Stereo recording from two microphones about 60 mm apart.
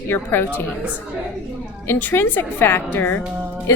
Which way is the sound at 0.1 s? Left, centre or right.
Left.